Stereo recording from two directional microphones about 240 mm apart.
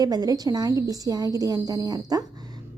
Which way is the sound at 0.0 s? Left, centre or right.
Centre.